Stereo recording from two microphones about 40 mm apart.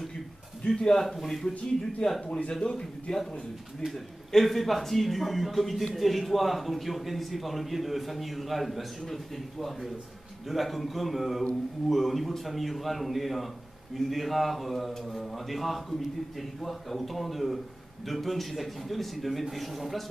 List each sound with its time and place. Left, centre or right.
0.7 s a man's voice: centre
1.0 s a man's voice: centre
2.0 s a man's voice: centre
4.3 s a man's voice: centre